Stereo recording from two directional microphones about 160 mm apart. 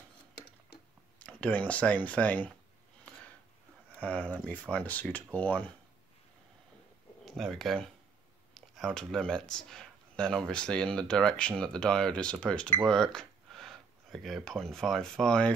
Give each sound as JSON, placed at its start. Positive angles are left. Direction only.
{"t": 0.3, "sound": "tick-tock", "side_deg": 90}
{"t": 1.2, "sound": "speech", "side_deg": 10}
{"t": 4.0, "sound": "speech", "side_deg": 10}
{"t": 7.2, "sound": "speech", "side_deg": 0}